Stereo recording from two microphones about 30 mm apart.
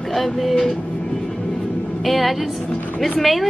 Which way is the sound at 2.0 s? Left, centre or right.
Centre.